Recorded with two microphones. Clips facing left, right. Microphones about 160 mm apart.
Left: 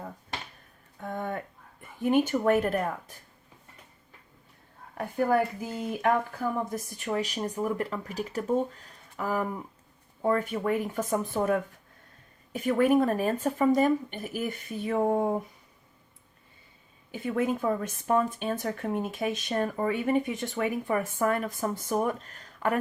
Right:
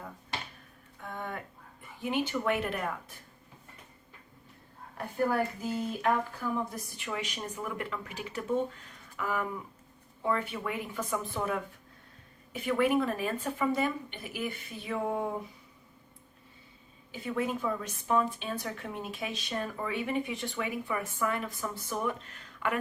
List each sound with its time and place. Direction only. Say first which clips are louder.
1.0 s a sound: left 6 dB; 45° left (ahead or behind)
1.8 s speech: left 7 dB; 50° left (ahead or behind)
6.0 s speech: left 6 dB; 45° left (ahead or behind)
17.1 s speech: left 4 dB; 50° left (ahead or behind)